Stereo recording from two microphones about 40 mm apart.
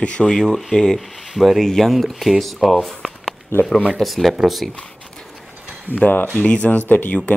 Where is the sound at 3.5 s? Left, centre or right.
Left.